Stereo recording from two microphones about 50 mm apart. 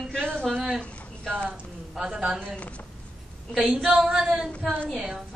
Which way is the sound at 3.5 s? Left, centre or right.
Centre.